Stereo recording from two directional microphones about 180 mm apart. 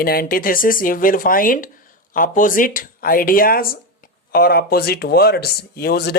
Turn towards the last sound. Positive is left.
turn(degrees=65)  # may be behind; listen again after turning